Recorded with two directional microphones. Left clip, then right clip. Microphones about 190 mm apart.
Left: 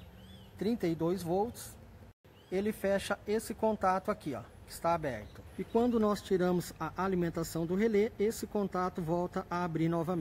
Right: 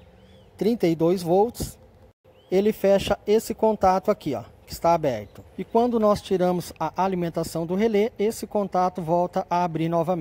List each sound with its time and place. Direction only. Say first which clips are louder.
0.6 s speech: right 11 dB; 35° right (ahead or behind)
2.5 s speech: right 12 dB; 35° right (ahead or behind)